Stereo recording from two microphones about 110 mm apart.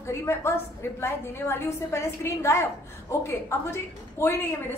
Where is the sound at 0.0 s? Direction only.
25° left (ahead or behind).